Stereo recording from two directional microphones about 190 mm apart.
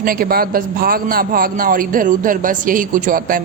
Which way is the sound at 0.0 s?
50° right (ahead or behind).